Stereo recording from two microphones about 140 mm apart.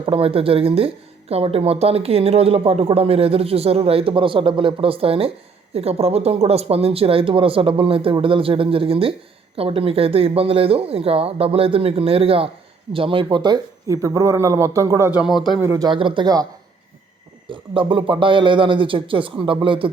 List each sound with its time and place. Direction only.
0.0 s speech: 40° right (ahead or behind); by 15.1 s 20° right (ahead or behind)
15.2 s speech: centre (ahead or behind)
15.6 s speech: 20° right (ahead or behind)
15.9 s speech: 35° right (ahead or behind)
17.5 s speech: 35° right (ahead or behind)